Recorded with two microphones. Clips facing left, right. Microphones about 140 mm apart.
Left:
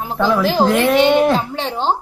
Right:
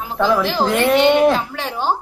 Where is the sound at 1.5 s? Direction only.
25° left (ahead or behind).